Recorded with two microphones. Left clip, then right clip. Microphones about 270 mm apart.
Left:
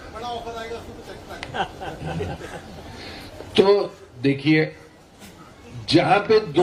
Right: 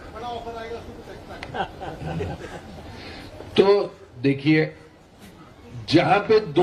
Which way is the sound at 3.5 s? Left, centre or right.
Centre.